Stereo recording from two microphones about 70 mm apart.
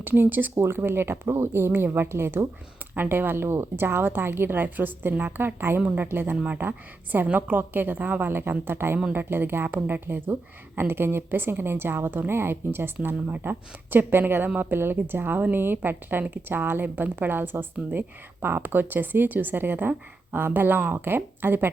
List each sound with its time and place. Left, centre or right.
0.0 s speech: right
5.8 s speech: right
6.1 s speech: right
6.3 s speech: centre
6.6 s speech: right